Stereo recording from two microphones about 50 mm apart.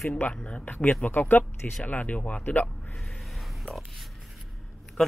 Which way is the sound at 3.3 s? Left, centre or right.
Centre.